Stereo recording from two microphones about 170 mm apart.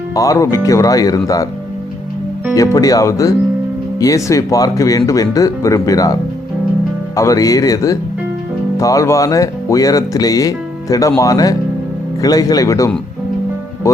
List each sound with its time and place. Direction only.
0.1 s speech: 20° left (ahead or behind)
2.6 s speech: 20° left (ahead or behind)
7.2 s speech: 20° left (ahead or behind)